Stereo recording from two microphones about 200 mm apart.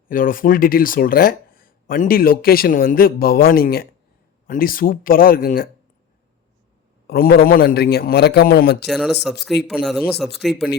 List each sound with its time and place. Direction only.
0.1 s speech: 45° left (ahead or behind)
7.1 s speech: 50° left (ahead or behind)
8.9 s a man's voice: centre (ahead or behind)